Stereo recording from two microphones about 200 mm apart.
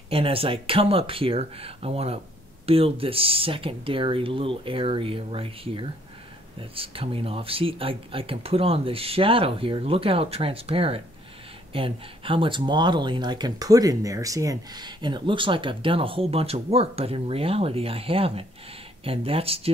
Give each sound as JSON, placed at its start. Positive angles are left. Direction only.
{"t": 0.1, "sound": "speech", "side_deg": -30}